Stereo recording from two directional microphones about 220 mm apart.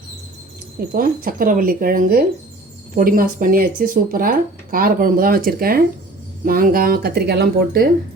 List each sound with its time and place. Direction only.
0.9 s speech: 40° right (ahead or behind)